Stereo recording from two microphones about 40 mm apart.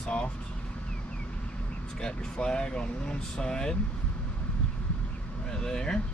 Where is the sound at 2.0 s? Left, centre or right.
Centre.